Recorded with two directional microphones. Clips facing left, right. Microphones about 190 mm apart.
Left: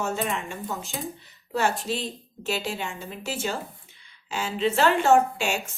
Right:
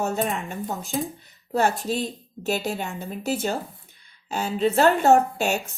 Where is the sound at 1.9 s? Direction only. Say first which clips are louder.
Right 3 dB; 40° right (ahead or behind).